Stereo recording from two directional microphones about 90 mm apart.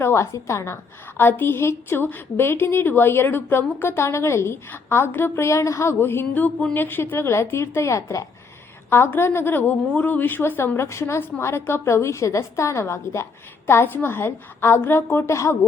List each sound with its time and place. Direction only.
0.0 s a woman's voice: 30° left (ahead or behind)